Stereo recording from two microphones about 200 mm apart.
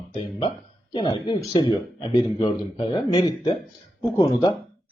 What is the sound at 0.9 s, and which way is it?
A man's voice, 25° left (ahead or behind).